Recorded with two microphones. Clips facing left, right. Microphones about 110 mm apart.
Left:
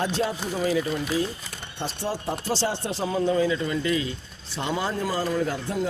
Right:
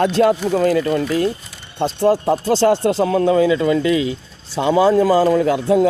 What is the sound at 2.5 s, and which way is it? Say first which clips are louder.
A man's voice: right 12 dB; 90° right.